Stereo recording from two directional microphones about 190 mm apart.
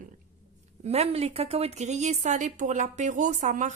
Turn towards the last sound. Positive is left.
turn(degrees=-40)  # may be behind; listen again after turning